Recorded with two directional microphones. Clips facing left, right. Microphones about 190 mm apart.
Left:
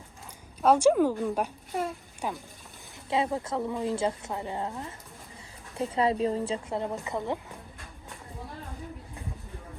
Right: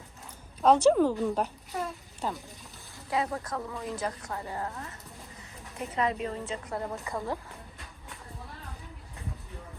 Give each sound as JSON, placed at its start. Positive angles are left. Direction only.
{"t": 0.6, "sound": "a woman's voice", "side_deg": 10}
{"t": 3.1, "sound": "speech", "side_deg": 25}